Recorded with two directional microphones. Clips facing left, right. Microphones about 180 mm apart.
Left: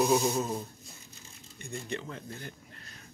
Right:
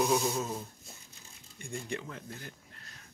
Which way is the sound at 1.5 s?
10° right (ahead or behind).